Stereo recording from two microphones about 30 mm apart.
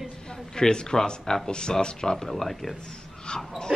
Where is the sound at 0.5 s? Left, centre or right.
Left.